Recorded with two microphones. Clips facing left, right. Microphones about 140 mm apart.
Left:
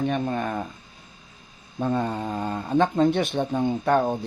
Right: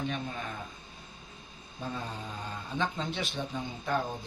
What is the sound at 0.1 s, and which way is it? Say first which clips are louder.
Speech: left 11 dB; 60° left (ahead or behind).